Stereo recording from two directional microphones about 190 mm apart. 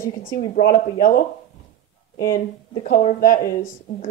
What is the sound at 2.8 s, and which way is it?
Speech, 45° left (ahead or behind).